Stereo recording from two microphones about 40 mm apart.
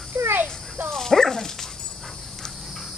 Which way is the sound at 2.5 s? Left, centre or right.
Centre.